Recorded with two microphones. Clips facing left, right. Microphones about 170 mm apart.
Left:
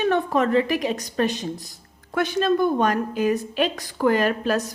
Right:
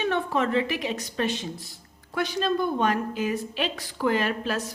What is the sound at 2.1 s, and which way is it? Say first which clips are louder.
A woman's voice: left 5 dB; 55° left (ahead or behind).